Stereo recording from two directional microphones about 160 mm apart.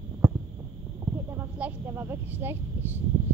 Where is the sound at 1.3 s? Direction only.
15° right (ahead or behind).